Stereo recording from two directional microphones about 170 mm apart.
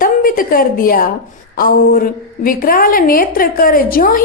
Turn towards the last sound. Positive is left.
turn(degrees=55)  # may be behind; listen again after turning